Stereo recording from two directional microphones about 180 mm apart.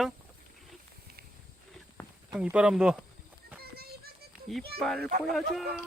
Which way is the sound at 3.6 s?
60° right (ahead or behind).